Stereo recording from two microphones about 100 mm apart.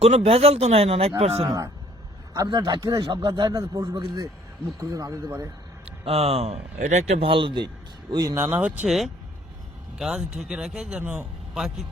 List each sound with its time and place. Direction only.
0.0 s speech: 85° right
1.2 s speech: 90° right
1.5 s speech: 35° right (ahead or behind)
6.1 s speech: 75° right (ahead or behind); by 7.7 s 55° right (ahead or behind)
8.1 s speech: 40° right (ahead or behind)
8.4 s speech: 20° right (ahead or behind)
8.9 s speech: centre (ahead or behind)
11.0 s speech: 20° right (ahead or behind)
11.5 s speech: 5° right (ahead or behind)